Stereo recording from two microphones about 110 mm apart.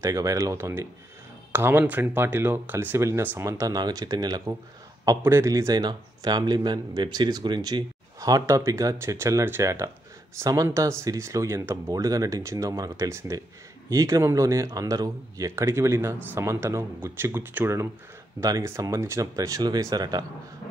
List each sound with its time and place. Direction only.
0.0 s speech: 30° right (ahead or behind)
5.2 s speech: 25° right (ahead or behind)
18.4 s speech: 30° right (ahead or behind)